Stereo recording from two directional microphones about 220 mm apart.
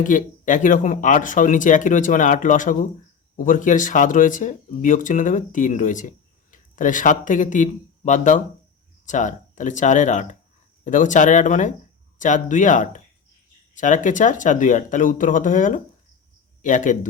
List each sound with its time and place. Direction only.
0.0 s speech: 35° left (ahead or behind)